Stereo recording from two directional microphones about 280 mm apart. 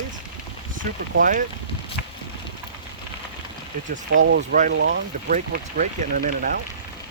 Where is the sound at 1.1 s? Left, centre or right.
Right.